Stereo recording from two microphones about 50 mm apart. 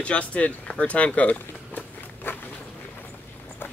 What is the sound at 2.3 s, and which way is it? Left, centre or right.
Walk, left.